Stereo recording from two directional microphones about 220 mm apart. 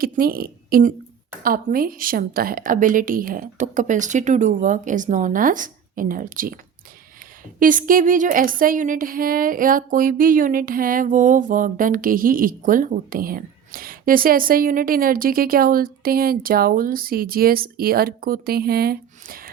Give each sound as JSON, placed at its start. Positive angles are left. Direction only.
{"t": 0.0, "sound": "speech", "side_deg": -40}
{"t": 7.6, "sound": "speech", "side_deg": -40}